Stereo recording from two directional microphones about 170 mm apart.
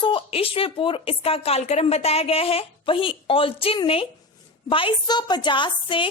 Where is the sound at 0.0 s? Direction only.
30° left (ahead or behind).